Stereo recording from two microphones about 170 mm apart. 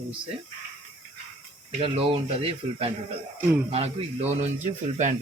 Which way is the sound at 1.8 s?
35° right (ahead or behind).